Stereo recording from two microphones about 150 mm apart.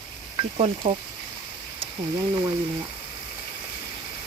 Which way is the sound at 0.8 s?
35° right (ahead or behind).